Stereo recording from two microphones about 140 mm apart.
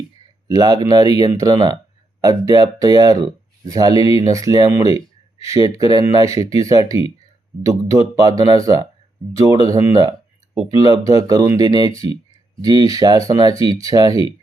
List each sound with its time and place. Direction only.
0.4 s speech: 30° right (ahead or behind)